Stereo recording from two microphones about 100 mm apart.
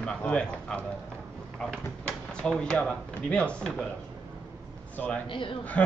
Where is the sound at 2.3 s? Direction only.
10° left (ahead or behind).